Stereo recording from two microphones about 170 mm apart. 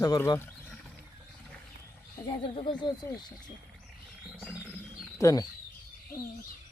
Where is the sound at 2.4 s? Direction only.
30° left (ahead or behind).